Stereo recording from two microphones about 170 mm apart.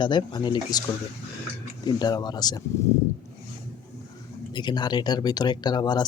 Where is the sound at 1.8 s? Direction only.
25° left (ahead or behind).